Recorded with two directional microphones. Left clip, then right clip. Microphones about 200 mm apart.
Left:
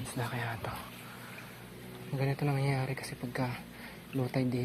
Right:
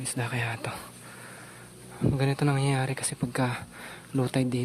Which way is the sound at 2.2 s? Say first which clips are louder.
Right 4 dB; 30° right (ahead or behind).